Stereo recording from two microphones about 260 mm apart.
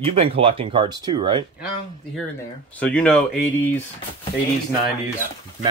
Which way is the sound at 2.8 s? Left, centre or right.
Centre.